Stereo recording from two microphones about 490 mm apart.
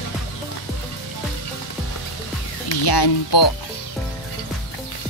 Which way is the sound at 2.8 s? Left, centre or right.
Left.